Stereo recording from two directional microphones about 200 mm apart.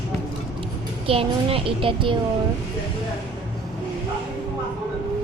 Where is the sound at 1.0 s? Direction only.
30° right (ahead or behind).